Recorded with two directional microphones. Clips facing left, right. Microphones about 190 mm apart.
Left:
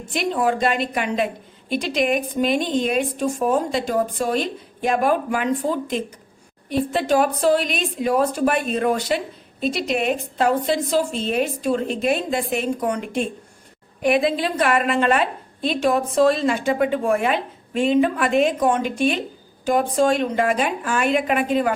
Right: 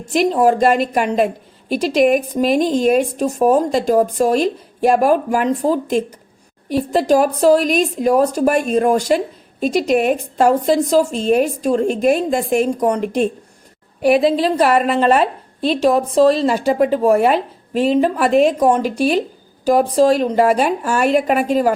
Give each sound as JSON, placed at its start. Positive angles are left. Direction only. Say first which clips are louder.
{"t": 0.0, "sound": "speech", "louder": "right 7 dB", "side_deg": -40}
{"t": 14.0, "sound": "a woman's voice", "louder": "right 5 dB", "side_deg": -35}